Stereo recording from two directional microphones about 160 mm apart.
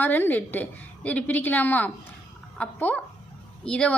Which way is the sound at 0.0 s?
10° left (ahead or behind).